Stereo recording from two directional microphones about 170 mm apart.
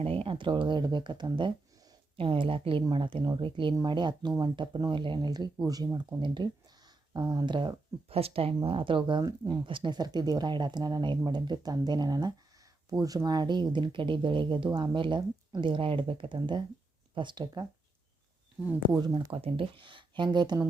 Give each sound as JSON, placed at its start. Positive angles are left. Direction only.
{"t": 0.0, "sound": "speech", "side_deg": -35}
{"t": 18.9, "sound": "speech", "side_deg": -20}
{"t": 19.3, "sound": "speech", "side_deg": -35}